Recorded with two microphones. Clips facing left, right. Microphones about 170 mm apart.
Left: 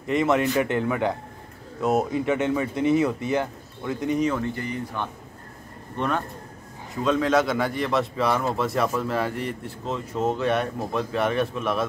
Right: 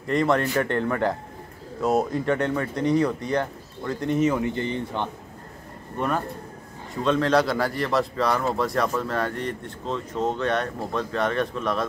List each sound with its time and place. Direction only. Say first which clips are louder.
0.0 s a man's voice: even; 5° left (ahead or behind)
4.5 s speech: right 3 dB; 25° right (ahead or behind)
5.9 s a man's voice: even; 5° right (ahead or behind)